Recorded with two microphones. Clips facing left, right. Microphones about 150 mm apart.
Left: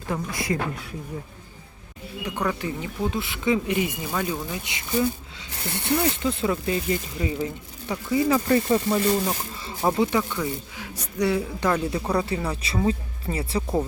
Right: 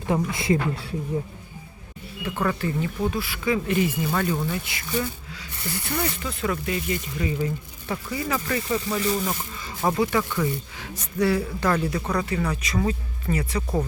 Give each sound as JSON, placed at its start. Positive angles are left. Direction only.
{"t": 0.1, "sound": "a woman's voice", "side_deg": -25}
{"t": 2.2, "sound": "speech", "side_deg": 15}
{"t": 7.9, "sound": "speech", "side_deg": 15}
{"t": 8.3, "sound": "speech", "side_deg": 30}
{"t": 13.6, "sound": "speech", "side_deg": 10}